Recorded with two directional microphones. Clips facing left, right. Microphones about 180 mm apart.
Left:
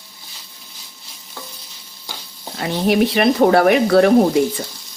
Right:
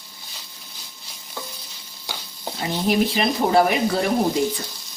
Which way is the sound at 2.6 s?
70° left (ahead or behind).